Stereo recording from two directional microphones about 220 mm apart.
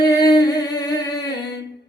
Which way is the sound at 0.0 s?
15° left (ahead or behind).